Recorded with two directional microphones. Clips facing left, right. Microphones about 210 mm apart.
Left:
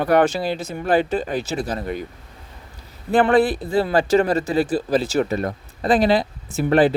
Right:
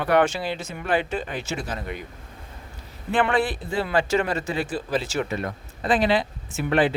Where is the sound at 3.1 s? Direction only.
40° left (ahead or behind).